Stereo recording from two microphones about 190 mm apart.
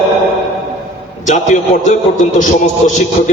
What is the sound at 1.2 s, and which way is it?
A man's voice, 40° left (ahead or behind).